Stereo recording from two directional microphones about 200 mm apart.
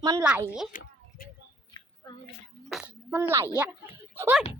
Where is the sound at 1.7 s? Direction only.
20° left (ahead or behind).